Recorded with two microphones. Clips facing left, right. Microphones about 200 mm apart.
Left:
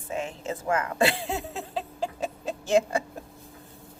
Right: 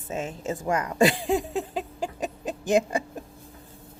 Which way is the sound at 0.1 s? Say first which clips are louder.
Right 1 dB; 15° right (ahead or behind).